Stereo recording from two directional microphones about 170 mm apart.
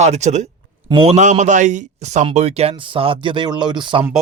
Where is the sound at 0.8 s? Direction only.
30° right (ahead or behind).